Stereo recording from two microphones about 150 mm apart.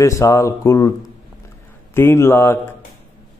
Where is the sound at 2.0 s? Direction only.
15° left (ahead or behind).